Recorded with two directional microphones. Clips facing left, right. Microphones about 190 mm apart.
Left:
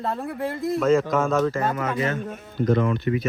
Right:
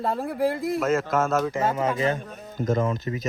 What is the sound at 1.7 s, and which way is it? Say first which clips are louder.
Speech: right 1 dB; 30° right (ahead or behind).